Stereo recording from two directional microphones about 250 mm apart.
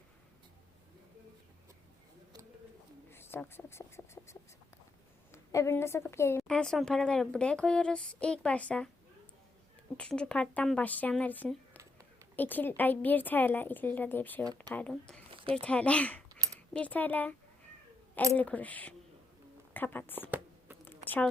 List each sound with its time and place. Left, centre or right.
3.1 s a woman's voice: centre
10.0 s a woman's voice: centre
14.4 s speech: centre
14.7 s a woman's voice: centre
15.3 s a sound: right
15.6 s a woman's voice: centre
18.3 s a woman's voice: centre
20.8 s a sound: centre